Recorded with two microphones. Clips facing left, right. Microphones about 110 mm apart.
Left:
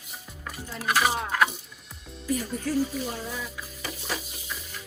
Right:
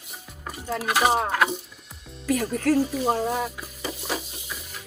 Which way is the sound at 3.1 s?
55° right (ahead or behind).